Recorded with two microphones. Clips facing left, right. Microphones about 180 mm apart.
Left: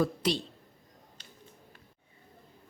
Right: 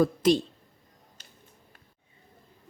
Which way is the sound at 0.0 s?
45° right (ahead or behind).